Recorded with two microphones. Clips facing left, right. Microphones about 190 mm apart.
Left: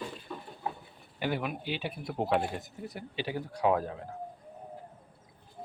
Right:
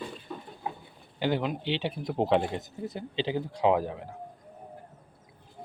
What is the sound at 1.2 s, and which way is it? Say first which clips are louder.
Speech: right 4 dB; 20° right (ahead or behind).